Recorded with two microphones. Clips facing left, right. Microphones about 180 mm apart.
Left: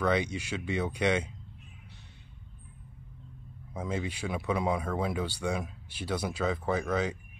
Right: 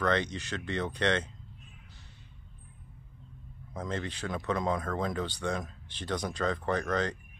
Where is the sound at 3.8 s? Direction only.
10° left (ahead or behind).